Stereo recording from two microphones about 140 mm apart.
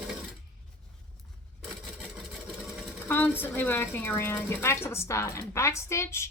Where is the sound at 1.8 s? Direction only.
Centre (ahead or behind).